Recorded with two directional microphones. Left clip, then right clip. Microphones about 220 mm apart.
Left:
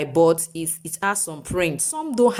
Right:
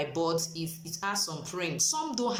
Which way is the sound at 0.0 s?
40° left (ahead or behind).